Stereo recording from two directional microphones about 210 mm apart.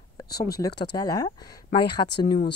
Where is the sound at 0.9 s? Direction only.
15° left (ahead or behind).